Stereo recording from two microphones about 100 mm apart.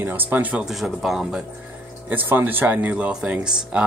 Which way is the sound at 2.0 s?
20° right (ahead or behind).